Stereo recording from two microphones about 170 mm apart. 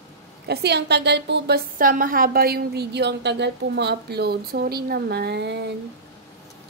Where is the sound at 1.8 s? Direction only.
55° right (ahead or behind); by 5.7 s 80° right.